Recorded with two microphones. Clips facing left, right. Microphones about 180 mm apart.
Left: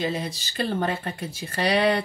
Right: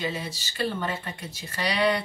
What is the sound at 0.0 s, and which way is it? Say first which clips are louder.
Speech: left 4 dB; 40° left (ahead or behind).